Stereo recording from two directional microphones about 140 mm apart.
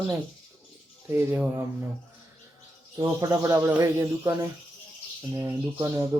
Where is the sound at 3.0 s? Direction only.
25° right (ahead or behind).